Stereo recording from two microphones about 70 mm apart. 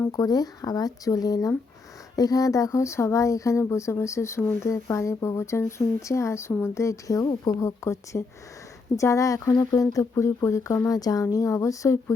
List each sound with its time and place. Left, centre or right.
0.1 s speech: left